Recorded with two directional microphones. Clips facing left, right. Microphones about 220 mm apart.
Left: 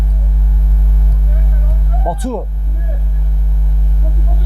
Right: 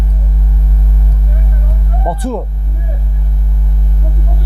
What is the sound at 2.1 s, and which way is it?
Vehicle, 20° right (ahead or behind).